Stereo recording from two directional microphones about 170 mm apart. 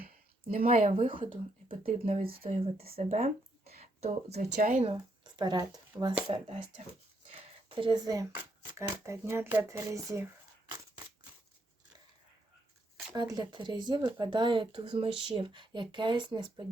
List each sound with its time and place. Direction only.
0.5 s speech: 35° right (ahead or behind)
5.2 s speech: 25° right (ahead or behind)
7.4 s speech: 30° right (ahead or behind)
13.1 s speech: 25° right (ahead or behind)